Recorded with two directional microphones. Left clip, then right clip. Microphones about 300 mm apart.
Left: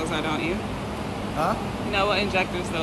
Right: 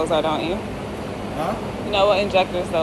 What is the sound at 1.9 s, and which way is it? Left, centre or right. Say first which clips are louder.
Speech: right 6 dB; centre.